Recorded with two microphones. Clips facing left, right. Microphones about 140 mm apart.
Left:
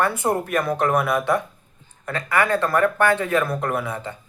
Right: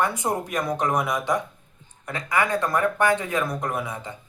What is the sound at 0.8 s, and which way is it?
Speech, 15° right (ahead or behind).